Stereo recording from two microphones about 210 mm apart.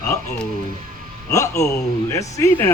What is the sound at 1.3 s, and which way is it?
Speech, 15° left (ahead or behind).